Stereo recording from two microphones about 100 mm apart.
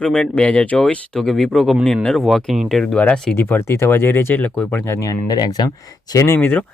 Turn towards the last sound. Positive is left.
turn(degrees=20)  # may be behind; listen again after turning